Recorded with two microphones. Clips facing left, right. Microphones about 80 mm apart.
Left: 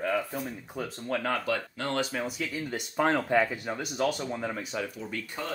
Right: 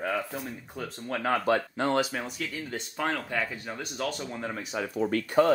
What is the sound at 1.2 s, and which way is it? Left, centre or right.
Speech, centre.